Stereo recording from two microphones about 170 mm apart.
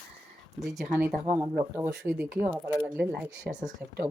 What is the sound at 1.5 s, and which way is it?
Speech, 15° right (ahead or behind).